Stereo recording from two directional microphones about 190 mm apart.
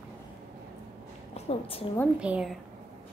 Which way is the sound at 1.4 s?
30° left (ahead or behind).